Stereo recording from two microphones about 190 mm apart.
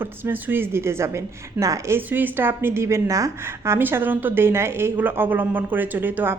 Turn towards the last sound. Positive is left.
turn(degrees=-10)  # may be behind; listen again after turning